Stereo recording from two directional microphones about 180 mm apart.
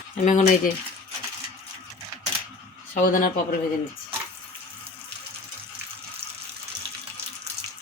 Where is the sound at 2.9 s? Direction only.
50° left (ahead or behind).